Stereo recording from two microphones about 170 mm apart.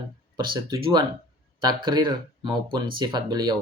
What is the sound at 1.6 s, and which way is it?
Speech, 25° right (ahead or behind).